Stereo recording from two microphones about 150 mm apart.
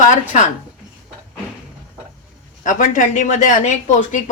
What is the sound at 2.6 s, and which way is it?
A woman's voice, 60° left (ahead or behind).